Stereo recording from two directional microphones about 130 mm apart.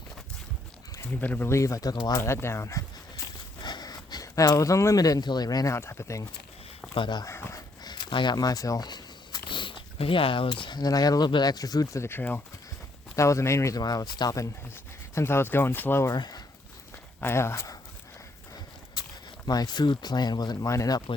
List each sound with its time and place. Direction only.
1.2 s speech: 15° left (ahead or behind)
3.6 s speech: 30° left (ahead or behind)
6.9 s speech: 35° left (ahead or behind)
7.3 s speech: 25° left (ahead or behind)
16.1 s speech: 30° left (ahead or behind)
17.2 s speech: 20° left (ahead or behind)
19.5 s speech: 30° left (ahead or behind)